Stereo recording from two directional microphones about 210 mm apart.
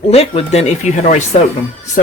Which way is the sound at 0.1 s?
30° left (ahead or behind).